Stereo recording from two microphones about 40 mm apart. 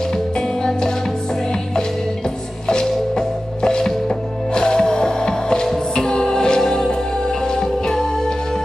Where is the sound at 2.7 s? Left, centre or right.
Centre.